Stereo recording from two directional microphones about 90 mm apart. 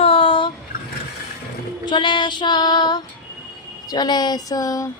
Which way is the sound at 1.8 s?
60° left (ahead or behind).